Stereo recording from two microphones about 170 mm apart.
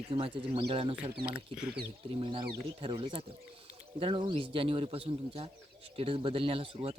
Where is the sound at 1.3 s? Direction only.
5° right (ahead or behind).